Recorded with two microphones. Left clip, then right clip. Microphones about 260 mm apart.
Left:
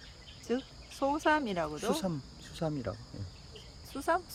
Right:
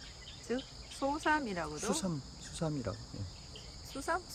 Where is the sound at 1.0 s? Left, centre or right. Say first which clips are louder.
Left 4 dB; left.